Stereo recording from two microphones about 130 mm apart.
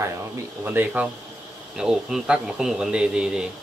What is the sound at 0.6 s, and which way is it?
A man's voice, 15° right (ahead or behind).